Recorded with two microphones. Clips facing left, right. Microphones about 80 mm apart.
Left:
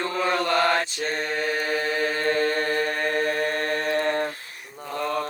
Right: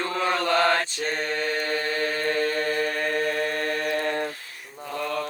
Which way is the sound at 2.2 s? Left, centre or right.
Left.